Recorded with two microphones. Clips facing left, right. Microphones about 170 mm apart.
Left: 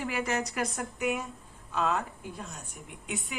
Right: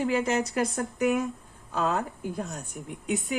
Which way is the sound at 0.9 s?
40° right (ahead or behind).